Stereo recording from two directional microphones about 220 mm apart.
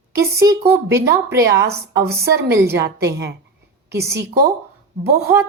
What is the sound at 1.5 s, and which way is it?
Speech, 50° right (ahead or behind).